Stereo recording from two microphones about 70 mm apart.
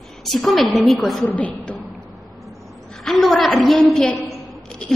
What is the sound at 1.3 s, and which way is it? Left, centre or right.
Speech, left.